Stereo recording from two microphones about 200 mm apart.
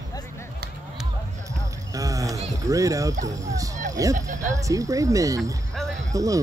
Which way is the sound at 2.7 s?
15° right (ahead or behind).